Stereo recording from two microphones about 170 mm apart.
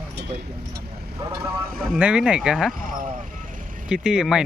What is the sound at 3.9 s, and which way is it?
Speech, 5° right (ahead or behind).